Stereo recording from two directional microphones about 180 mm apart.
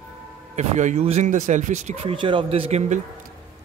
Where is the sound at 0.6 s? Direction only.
40° right (ahead or behind).